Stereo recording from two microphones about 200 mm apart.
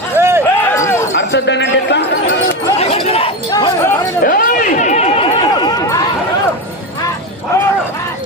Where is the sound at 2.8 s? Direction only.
30° left (ahead or behind).